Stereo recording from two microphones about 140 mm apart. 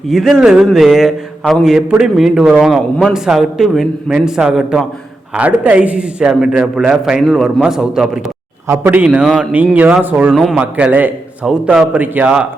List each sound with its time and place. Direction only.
0.1 s a man's voice: centre (ahead or behind)
8.6 s a man's voice: 20° right (ahead or behind)
9.0 s a man's voice: centre (ahead or behind)